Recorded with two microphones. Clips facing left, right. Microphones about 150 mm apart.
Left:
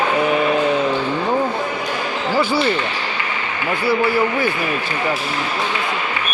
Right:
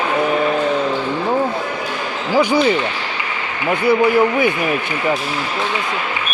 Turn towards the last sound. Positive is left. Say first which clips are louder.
# right 4 dB
turn(degrees=-20)  # may be behind; listen again after turning